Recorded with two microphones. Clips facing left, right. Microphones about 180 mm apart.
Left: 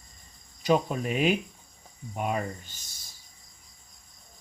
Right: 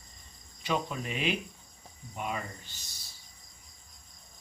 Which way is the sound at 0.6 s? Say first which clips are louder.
Left 8 dB; 45° left (ahead or behind).